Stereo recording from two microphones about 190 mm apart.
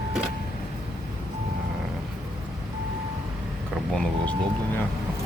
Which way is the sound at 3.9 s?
5° left (ahead or behind).